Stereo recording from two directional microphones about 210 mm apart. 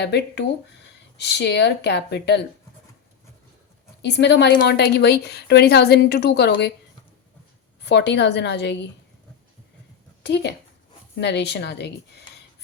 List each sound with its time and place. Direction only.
0.0 s a woman's voice: 55° left (ahead or behind)
4.0 s a woman's voice: 55° left (ahead or behind)
7.8 s a woman's voice: 55° left (ahead or behind)
10.2 s a woman's voice: 55° left (ahead or behind)